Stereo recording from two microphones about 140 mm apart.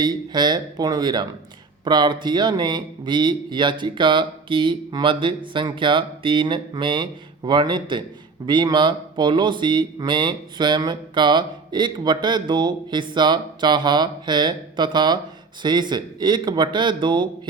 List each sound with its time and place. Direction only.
0.0 s speech: 30° right (ahead or behind)